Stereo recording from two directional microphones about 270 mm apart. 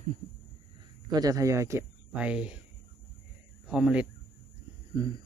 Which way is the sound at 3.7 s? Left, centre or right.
Centre.